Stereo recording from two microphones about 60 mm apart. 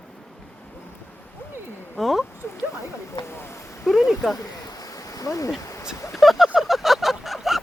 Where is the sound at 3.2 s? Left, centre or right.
Left.